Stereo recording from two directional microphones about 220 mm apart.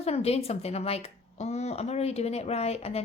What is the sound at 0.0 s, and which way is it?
A woman's voice, 30° left (ahead or behind).